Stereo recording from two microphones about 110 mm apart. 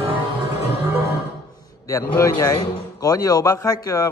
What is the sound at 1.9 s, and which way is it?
A man's voice, 25° left (ahead or behind).